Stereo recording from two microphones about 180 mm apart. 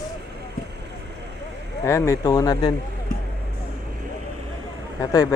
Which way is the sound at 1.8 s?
15° left (ahead or behind).